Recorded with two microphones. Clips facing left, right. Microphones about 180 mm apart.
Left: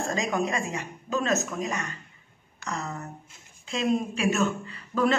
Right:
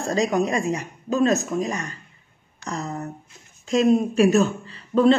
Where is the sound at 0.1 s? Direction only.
35° right (ahead or behind).